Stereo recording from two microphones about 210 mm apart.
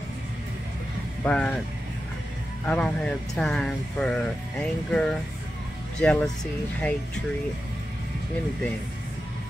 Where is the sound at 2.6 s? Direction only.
5° left (ahead or behind).